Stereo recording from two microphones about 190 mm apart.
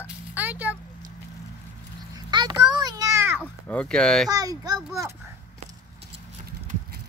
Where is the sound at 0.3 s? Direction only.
10° right (ahead or behind).